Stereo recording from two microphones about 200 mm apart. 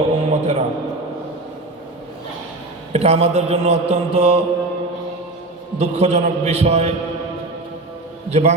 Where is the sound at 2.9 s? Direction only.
30° right (ahead or behind).